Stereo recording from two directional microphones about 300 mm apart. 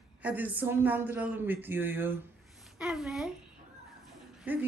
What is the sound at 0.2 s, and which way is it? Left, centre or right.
A woman's voice, centre.